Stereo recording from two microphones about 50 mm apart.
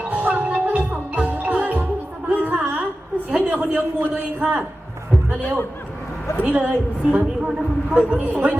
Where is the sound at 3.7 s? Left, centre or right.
Right.